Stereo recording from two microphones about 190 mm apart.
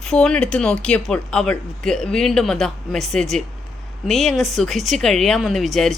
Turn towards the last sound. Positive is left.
turn(degrees=0)  # may be behind; listen again after turning